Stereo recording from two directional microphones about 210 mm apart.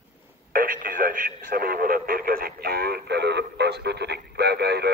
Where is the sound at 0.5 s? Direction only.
40° right (ahead or behind).